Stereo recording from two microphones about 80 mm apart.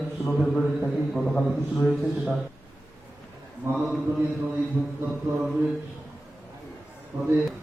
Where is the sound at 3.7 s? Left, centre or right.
Right.